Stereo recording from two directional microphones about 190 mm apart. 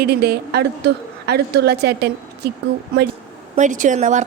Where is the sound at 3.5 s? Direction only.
40° right (ahead or behind).